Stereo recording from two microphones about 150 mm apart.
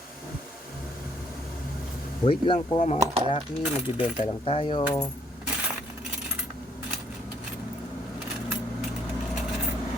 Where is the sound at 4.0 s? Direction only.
40° left (ahead or behind).